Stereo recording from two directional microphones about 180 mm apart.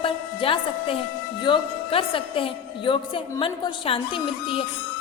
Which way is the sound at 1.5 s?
30° left (ahead or behind).